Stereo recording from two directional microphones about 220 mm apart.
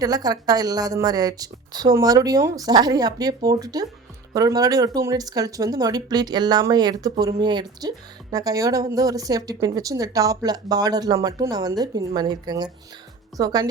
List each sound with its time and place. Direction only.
0.0 s speech: 15° right (ahead or behind)